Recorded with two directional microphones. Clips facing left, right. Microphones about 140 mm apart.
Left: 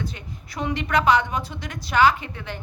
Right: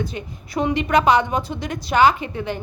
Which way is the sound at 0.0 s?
15° right (ahead or behind).